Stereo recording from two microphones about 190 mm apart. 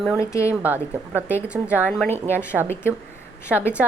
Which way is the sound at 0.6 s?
10° right (ahead or behind).